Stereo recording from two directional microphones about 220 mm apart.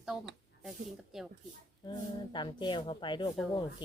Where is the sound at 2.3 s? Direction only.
20° left (ahead or behind).